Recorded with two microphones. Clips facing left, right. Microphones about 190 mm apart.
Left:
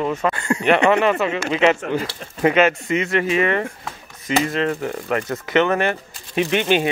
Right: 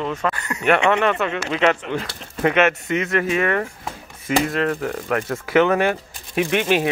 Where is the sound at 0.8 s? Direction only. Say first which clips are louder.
Left 2 dB; 5° left (ahead or behind).